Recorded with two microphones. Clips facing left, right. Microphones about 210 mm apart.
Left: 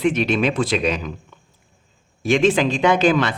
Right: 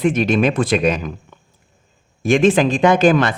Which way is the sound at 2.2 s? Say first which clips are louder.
Right 3 dB; 50° right (ahead or behind).